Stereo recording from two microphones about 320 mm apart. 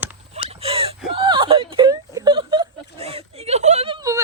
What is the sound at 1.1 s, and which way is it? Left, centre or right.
Whimper, centre.